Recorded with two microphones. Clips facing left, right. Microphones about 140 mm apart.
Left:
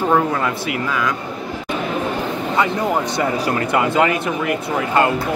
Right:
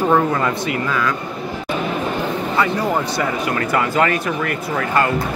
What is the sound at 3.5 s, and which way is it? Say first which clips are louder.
Speech: left 1 dB; 20° left (ahead or behind).